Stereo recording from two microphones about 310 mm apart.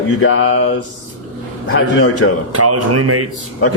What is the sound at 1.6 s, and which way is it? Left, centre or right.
Speech, left.